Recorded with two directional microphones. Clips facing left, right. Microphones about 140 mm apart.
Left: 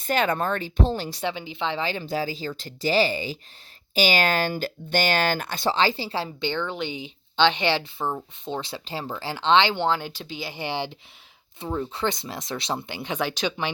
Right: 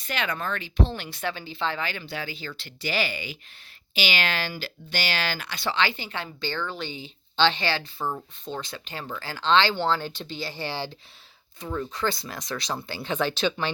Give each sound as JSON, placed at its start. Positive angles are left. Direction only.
{"t": 0.1, "sound": "speech", "side_deg": 45}
{"t": 1.2, "sound": "speech", "side_deg": 20}
{"t": 1.8, "sound": "speech", "side_deg": 30}
{"t": 6.2, "sound": "speech", "side_deg": 20}